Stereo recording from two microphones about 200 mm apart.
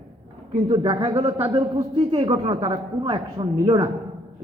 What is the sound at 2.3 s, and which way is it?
A man's voice, 15° right (ahead or behind).